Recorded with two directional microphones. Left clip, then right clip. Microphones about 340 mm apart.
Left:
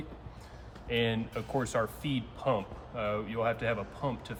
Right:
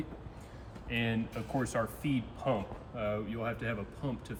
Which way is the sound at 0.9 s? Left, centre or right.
Centre.